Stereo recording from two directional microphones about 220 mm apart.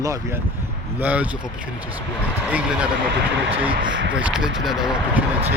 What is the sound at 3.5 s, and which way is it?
Speech, 5° right (ahead or behind).